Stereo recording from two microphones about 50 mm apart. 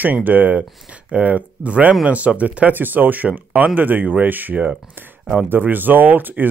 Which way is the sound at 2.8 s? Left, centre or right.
Right.